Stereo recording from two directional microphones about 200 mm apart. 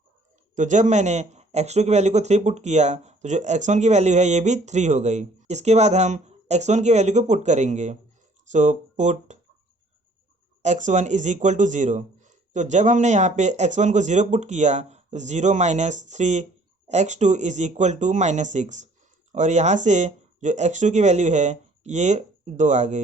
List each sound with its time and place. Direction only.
0.5 s speech: 40° right (ahead or behind)
10.6 s speech: 35° right (ahead or behind)